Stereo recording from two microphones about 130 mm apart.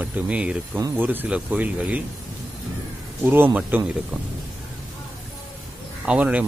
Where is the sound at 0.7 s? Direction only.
20° right (ahead or behind).